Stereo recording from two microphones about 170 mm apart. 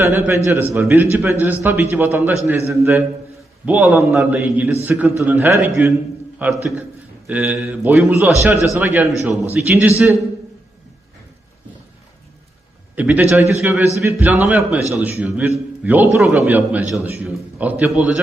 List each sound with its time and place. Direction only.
0.0 s a man's voice: 15° right (ahead or behind)
13.0 s a man's voice: 10° right (ahead or behind)